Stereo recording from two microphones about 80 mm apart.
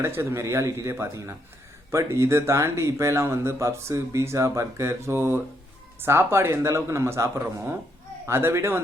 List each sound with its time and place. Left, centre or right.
0.0 s speech: right